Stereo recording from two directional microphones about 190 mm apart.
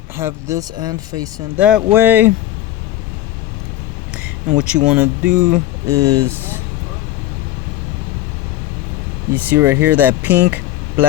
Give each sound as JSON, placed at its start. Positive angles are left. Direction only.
{"t": 0.2, "sound": "speech", "side_deg": -15}
{"t": 1.5, "sound": "speech", "side_deg": -5}
{"t": 4.1, "sound": "speech", "side_deg": -5}
{"t": 9.3, "sound": "speech", "side_deg": -10}